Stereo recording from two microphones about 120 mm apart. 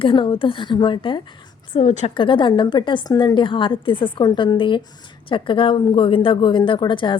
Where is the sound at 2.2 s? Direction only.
45° left (ahead or behind).